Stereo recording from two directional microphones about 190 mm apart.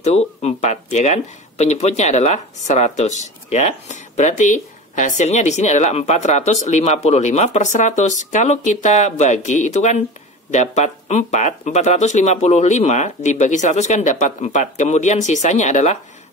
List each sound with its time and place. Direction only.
0.0 s speech: 35° left (ahead or behind)